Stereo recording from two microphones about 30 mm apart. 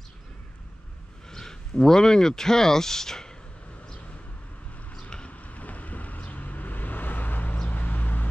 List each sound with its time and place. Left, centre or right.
1.3 s speech: centre
5.3 s vehicle: left
7.6 s a sound: left